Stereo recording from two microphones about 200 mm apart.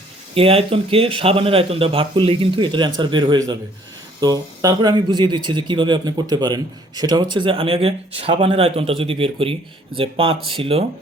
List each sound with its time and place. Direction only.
0.3 s speech: 30° right (ahead or behind)